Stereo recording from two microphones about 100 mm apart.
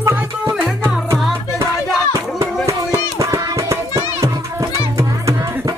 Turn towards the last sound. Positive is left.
turn(degrees=-30)  # may be behind; listen again after turning